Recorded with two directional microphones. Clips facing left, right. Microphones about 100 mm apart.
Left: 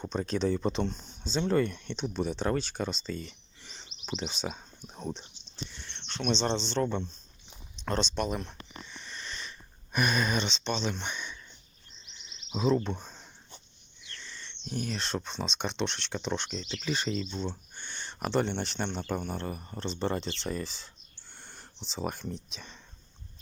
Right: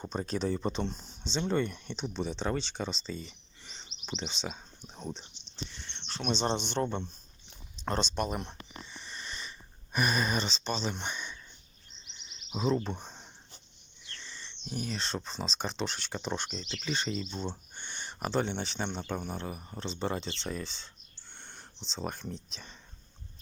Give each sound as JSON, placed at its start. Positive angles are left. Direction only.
{"t": 0.0, "sound": "speech", "side_deg": -5}
{"t": 2.0, "sound": "speech", "side_deg": 5}
{"t": 5.6, "sound": "a sound", "side_deg": 0}
{"t": 6.0, "sound": "speech", "side_deg": -5}
{"t": 8.1, "sound": "speech", "side_deg": -5}
{"t": 9.0, "sound": "sniff", "side_deg": -5}
{"t": 10.6, "sound": "speech", "side_deg": -5}
{"t": 12.5, "sound": "speech", "side_deg": -5}
{"t": 13.0, "sound": "a sound", "side_deg": -20}
{"t": 14.3, "sound": "speech", "side_deg": -15}
{"t": 16.7, "sound": "speech", "side_deg": 0}
{"t": 17.5, "sound": "a sound", "side_deg": -15}
{"t": 18.2, "sound": "speech", "side_deg": 0}